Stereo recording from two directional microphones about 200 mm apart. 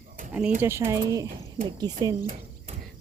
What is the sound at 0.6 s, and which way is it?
Speech, 10° right (ahead or behind).